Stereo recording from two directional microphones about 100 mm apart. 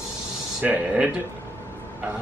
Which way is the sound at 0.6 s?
15° right (ahead or behind).